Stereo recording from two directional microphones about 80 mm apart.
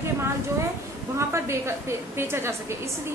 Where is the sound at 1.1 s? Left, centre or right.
Right.